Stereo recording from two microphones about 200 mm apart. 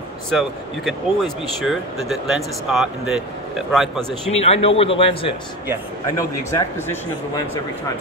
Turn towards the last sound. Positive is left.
turn(degrees=15)  # may be behind; listen again after turning